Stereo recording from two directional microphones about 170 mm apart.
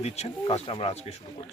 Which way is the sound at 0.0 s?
40° left (ahead or behind).